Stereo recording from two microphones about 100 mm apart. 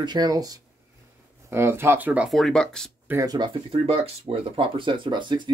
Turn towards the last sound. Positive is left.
turn(degrees=-50)  # may be behind; listen again after turning